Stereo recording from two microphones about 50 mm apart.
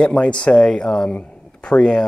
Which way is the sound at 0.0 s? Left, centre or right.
Left.